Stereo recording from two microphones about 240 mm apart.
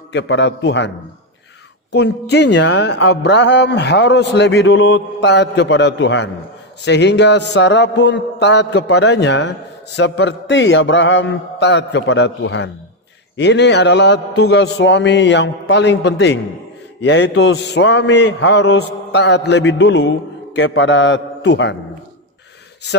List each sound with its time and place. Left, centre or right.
0.1 s speech: left